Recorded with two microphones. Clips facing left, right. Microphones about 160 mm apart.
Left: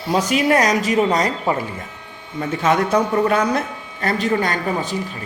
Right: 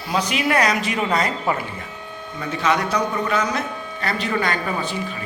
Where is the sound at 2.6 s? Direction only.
50° left (ahead or behind).